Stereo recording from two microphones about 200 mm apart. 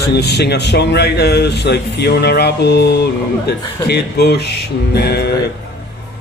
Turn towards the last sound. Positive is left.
turn(degrees=55)  # may be behind; listen again after turning